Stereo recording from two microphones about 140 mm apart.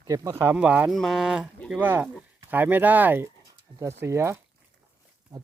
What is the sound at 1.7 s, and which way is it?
Speech, 15° right (ahead or behind).